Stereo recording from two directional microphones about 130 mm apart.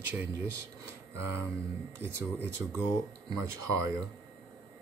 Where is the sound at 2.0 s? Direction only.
20° right (ahead or behind).